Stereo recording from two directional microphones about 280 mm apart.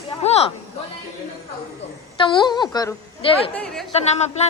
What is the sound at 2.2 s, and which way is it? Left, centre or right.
A woman's voice, centre.